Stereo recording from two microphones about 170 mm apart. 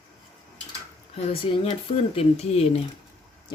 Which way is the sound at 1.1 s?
35° left (ahead or behind).